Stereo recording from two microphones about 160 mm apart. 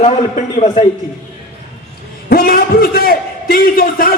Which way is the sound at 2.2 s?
65° left (ahead or behind).